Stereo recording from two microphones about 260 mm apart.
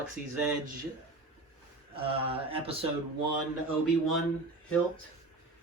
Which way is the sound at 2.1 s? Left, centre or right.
Right.